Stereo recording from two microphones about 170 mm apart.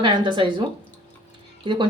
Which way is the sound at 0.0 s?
30° right (ahead or behind).